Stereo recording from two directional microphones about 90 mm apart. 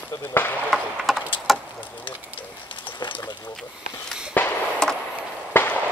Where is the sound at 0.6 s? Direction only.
5° right (ahead or behind).